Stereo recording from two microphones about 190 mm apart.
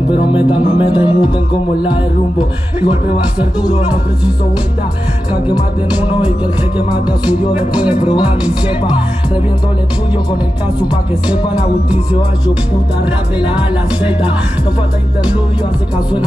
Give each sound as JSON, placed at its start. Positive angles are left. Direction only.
{"t": 0.1, "sound": "music", "side_deg": 25}
{"t": 7.1, "sound": "music", "side_deg": -5}